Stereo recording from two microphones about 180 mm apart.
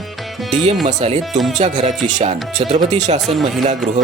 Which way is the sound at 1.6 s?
40° right (ahead or behind).